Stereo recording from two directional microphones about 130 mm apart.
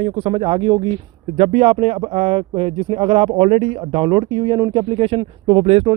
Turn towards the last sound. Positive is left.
turn(degrees=-50)  # may be behind; listen again after turning